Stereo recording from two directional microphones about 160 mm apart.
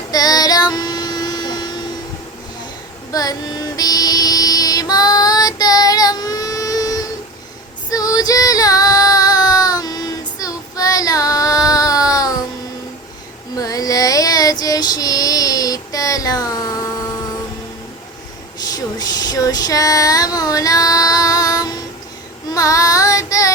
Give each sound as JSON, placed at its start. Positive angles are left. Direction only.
{"t": 0.1, "sound": "child singing", "side_deg": 25}
{"t": 3.1, "sound": "female singing", "side_deg": 25}
{"t": 7.9, "sound": "child singing", "side_deg": 20}
{"t": 13.6, "sound": "female singing", "side_deg": 20}
{"t": 18.9, "sound": "female singing", "side_deg": 25}
{"t": 22.5, "sound": "child singing", "side_deg": 20}